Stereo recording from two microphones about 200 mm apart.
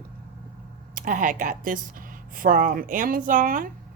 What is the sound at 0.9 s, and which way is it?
Speech, 40° right (ahead or behind).